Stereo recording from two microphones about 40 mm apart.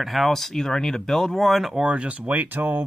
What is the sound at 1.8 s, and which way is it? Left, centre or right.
Speech, right.